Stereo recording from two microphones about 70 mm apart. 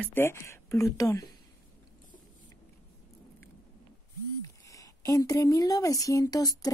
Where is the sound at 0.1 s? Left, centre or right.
Left.